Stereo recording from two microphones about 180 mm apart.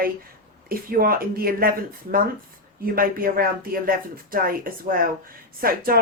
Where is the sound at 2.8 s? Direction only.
55° right (ahead or behind).